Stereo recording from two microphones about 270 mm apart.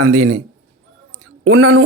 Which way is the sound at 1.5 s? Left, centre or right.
Right.